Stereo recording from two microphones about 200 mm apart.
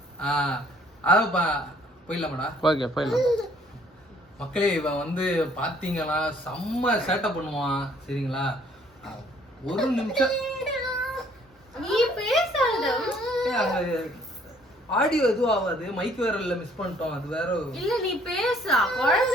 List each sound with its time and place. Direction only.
0.2 s a woman's voice: 5° left (ahead or behind)
2.6 s a man's voice: 20° left (ahead or behind)
3.0 s a woman's voice: centre (ahead or behind)
4.4 s a woman's voice: 5° left (ahead or behind)
9.7 s speech: centre (ahead or behind)
11.8 s a sound: centre (ahead or behind)
14.8 s a woman's voice: centre (ahead or behind)